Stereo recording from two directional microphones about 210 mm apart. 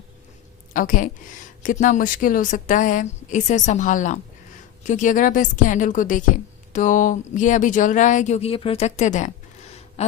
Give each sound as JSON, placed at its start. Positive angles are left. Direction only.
{"t": 0.7, "sound": "a woman's voice", "side_deg": 40}